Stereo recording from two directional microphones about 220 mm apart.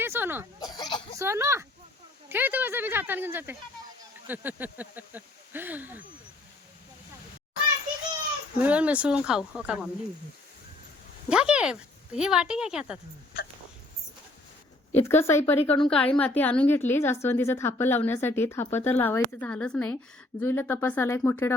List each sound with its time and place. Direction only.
0.0 s a sound: 10° right (ahead or behind)
0.6 s a sound: 20° left (ahead or behind)
1.2 s speech: 10° right (ahead or behind)
8.6 s speech: 5° right (ahead or behind)
11.3 s speech: 5° right (ahead or behind)
14.9 s speech: 10° left (ahead or behind)